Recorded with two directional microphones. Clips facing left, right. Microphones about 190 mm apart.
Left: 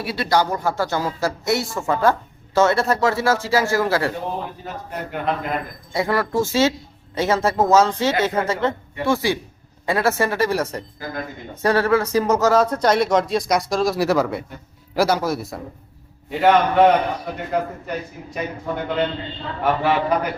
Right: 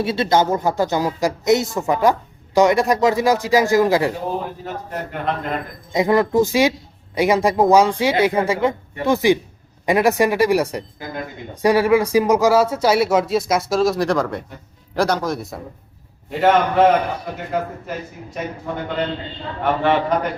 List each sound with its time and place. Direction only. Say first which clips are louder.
0.0 s speech: right 3 dB; 25° right (ahead or behind)
4.6 s a man's voice: right 2 dB; centre (ahead or behind)
5.9 s a man's voice: right 5 dB; 20° right (ahead or behind); by 18.5 s centre (ahead or behind)
19.6 s a man's voice: right 1 dB; 5° left (ahead or behind)